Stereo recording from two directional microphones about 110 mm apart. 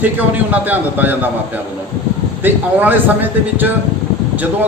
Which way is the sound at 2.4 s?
15° right (ahead or behind).